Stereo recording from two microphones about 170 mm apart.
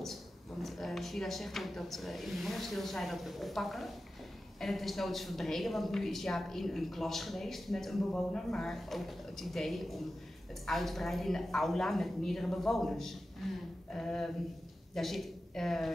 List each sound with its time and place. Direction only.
0.0 s a woman's voice: centre (ahead or behind)